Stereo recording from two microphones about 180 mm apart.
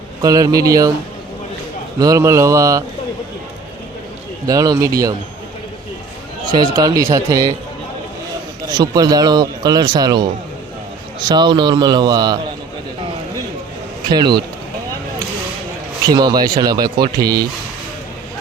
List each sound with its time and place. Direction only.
0.2 s speech: 20° right (ahead or behind)
2.0 s speech: 20° right (ahead or behind)
4.4 s speech: 20° right (ahead or behind)
6.5 s speech: 20° right (ahead or behind)
8.6 s speech: 20° right (ahead or behind)
14.1 s speech: 25° right (ahead or behind)
16.0 s speech: 20° right (ahead or behind)